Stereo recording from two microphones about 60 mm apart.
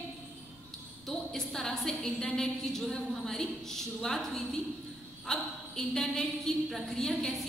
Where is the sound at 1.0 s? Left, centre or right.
Centre.